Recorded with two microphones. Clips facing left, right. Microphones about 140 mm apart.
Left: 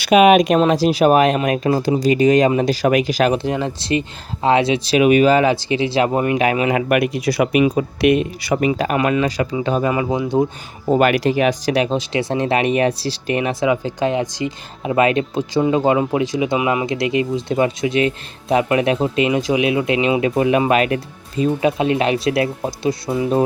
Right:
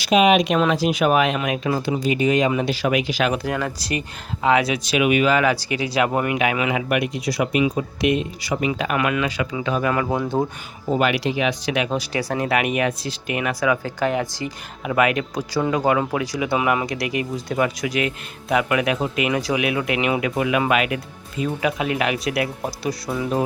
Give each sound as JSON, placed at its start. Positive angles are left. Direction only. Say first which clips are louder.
{"t": 0.0, "sound": "speech", "louder": "left 5 dB", "side_deg": 60}
{"t": 0.6, "sound": "speech", "louder": "left 5 dB", "side_deg": 35}
{"t": 3.3, "sound": "speech", "louder": "left 4 dB", "side_deg": 25}
{"t": 6.7, "sound": "speech", "louder": "left 5 dB", "side_deg": 55}
{"t": 8.8, "sound": "speech", "louder": "left 4 dB", "side_deg": 35}
{"t": 9.9, "sound": "speech", "louder": "left 2 dB", "side_deg": 15}
{"t": 10.8, "sound": "speech", "louder": "left 5 dB", "side_deg": 45}
{"t": 11.9, "sound": "speech", "louder": "left 4 dB", "side_deg": 20}